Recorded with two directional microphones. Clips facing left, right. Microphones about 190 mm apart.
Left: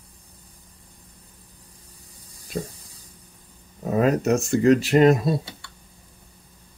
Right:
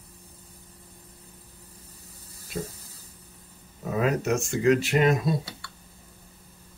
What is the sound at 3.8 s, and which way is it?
Speech, 35° left (ahead or behind).